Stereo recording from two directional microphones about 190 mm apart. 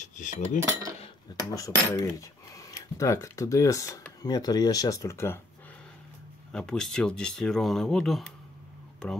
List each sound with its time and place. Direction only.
0.0 s cutlery: 40° left (ahead or behind)
0.6 s cutlery: 15° right (ahead or behind)
1.5 s speech: 20° left (ahead or behind)
6.5 s speech: 5° left (ahead or behind)